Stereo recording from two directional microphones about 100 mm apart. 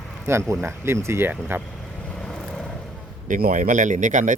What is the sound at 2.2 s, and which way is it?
Vehicle, 5° left (ahead or behind).